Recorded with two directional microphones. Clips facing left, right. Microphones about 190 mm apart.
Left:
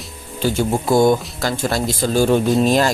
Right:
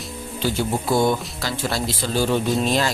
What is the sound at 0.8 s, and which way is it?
Speech, 45° left (ahead or behind).